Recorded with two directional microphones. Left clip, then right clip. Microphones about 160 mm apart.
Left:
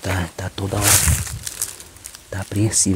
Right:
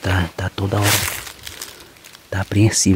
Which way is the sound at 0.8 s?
Centre (ahead or behind).